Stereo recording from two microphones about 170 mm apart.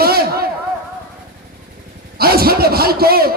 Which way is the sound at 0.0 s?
65° right (ahead or behind).